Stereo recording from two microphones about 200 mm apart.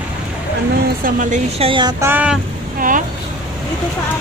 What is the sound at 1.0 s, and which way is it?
Speech, 35° right (ahead or behind).